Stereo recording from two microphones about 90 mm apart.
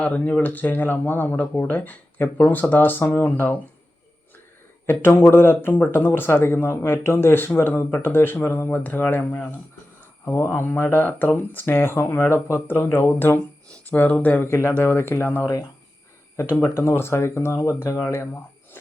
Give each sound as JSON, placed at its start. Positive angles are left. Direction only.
{"t": 0.0, "sound": "speech", "side_deg": 15}
{"t": 4.9, "sound": "speech", "side_deg": 25}